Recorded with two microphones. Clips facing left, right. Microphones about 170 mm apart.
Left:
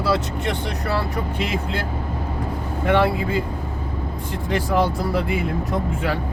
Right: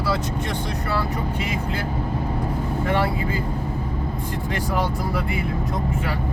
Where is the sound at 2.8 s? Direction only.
70° left (ahead or behind).